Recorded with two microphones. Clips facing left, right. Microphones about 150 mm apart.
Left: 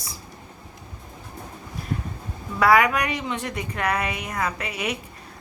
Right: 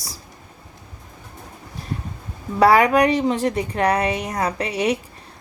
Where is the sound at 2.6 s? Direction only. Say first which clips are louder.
Right 5 dB; 30° right (ahead or behind).